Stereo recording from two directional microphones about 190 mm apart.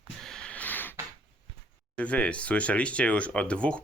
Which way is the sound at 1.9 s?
5° left (ahead or behind).